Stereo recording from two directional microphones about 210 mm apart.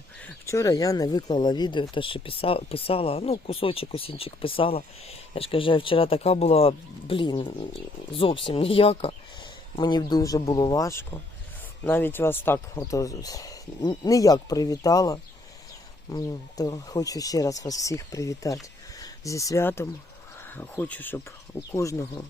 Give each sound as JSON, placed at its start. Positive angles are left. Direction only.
{"t": 0.4, "sound": "speech", "side_deg": 15}